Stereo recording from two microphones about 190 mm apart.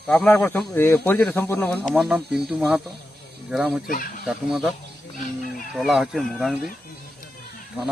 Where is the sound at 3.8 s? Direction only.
45° left (ahead or behind).